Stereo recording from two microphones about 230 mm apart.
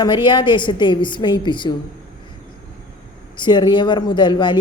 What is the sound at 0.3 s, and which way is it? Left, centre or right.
Speech, centre.